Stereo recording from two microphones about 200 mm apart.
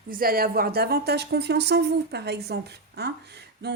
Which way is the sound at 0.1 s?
45° right (ahead or behind).